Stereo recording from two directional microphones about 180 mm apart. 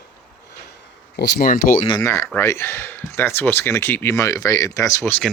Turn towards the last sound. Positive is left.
turn(degrees=10)  # may be behind; listen again after turning